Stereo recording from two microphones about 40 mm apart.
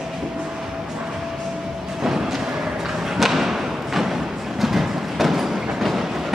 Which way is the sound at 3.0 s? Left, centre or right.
Centre.